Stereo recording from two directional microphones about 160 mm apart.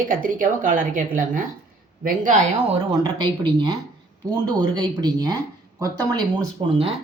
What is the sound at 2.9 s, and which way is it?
Speech, 25° right (ahead or behind).